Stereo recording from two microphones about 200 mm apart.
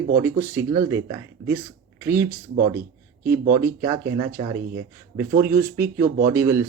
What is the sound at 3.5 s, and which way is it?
Speech, 15° right (ahead or behind).